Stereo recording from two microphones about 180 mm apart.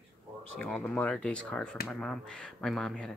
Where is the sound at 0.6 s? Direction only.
5° left (ahead or behind).